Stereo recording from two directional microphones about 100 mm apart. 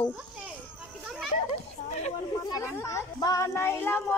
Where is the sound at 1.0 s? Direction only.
5° right (ahead or behind).